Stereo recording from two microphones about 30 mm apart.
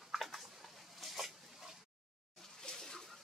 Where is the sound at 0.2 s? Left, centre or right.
Centre.